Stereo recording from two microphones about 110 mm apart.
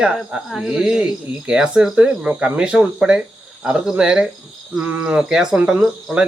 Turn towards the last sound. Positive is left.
turn(degrees=0)  # may be behind; listen again after turning